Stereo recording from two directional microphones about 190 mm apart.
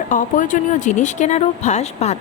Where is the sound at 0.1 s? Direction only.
45° left (ahead or behind).